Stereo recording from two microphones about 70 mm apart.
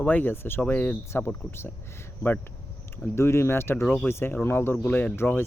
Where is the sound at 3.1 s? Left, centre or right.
Left.